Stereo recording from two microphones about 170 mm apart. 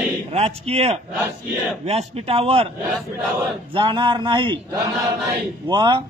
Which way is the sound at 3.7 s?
30° right (ahead or behind).